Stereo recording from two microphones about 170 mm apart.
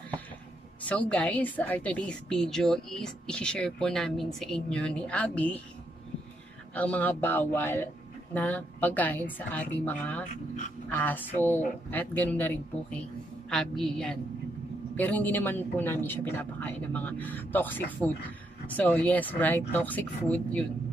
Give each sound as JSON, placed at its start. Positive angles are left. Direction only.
{"t": 0.8, "sound": "a woman's voice", "side_deg": 5}
{"t": 6.7, "sound": "a man's voice", "side_deg": 10}